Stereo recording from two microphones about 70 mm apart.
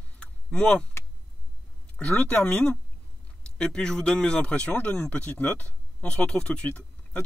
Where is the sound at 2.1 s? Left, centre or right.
Left.